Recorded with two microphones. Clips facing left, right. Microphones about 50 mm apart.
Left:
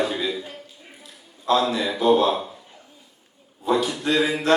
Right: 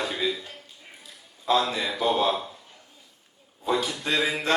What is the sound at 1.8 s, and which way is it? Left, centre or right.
Speech, centre.